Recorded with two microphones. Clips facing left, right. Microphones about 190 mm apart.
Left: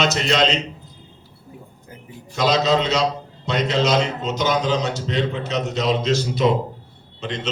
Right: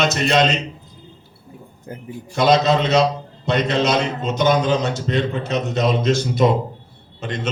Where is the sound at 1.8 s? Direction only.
55° right (ahead or behind).